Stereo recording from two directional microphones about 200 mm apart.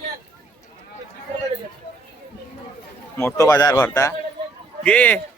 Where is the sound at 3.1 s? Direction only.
15° left (ahead or behind).